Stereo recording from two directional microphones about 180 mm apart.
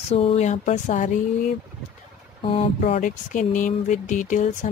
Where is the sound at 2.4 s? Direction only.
30° left (ahead or behind).